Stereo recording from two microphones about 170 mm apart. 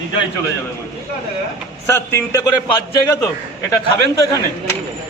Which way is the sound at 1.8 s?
15° left (ahead or behind).